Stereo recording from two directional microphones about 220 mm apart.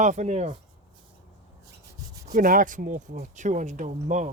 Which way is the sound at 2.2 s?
35° right (ahead or behind).